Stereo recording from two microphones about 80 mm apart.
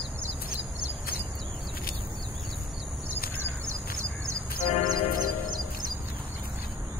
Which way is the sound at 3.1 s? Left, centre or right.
Right.